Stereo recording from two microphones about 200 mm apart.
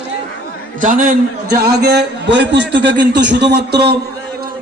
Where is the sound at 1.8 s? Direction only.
55° right (ahead or behind).